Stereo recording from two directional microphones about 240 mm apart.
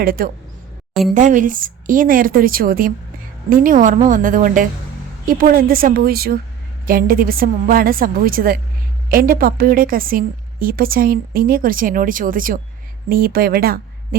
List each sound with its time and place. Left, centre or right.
0.0 s a woman's voice: right